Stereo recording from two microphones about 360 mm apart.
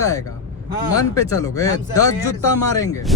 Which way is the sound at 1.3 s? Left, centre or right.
Centre.